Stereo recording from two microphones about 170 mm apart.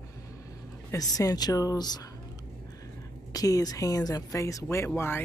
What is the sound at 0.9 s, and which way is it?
Speech, 20° left (ahead or behind).